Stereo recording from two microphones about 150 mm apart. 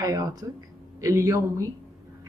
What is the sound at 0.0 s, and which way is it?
Speech, 25° right (ahead or behind).